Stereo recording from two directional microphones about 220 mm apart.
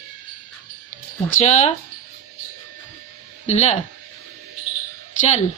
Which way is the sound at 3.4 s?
30° left (ahead or behind).